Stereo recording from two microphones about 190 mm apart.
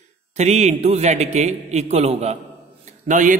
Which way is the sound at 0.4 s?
35° right (ahead or behind).